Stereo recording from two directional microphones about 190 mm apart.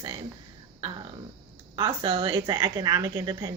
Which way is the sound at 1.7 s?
25° right (ahead or behind).